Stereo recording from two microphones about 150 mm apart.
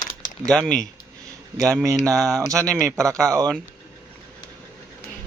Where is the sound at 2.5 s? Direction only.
20° right (ahead or behind).